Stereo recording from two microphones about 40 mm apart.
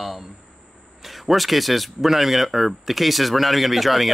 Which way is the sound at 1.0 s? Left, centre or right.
Centre.